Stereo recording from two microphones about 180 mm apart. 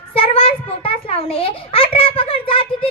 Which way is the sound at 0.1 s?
30° left (ahead or behind).